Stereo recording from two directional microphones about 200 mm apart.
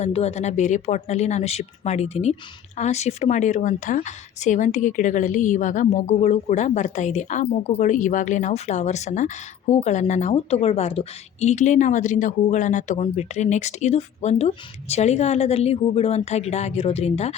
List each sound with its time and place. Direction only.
0.0 s a woman's voice: 30° left (ahead or behind)